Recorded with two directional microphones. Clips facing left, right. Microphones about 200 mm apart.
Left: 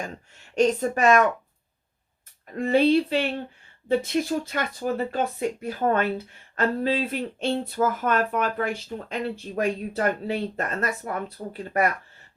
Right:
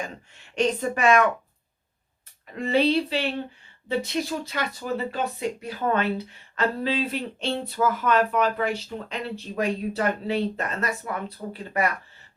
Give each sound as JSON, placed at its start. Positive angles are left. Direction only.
{"t": 0.0, "sound": "speech", "side_deg": 45}
{"t": 2.6, "sound": "speech", "side_deg": 50}